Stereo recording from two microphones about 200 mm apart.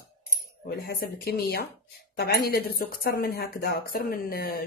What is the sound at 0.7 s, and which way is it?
Speech, 50° left (ahead or behind).